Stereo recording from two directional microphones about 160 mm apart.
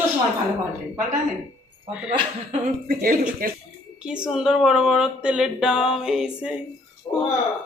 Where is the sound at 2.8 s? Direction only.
60° right (ahead or behind).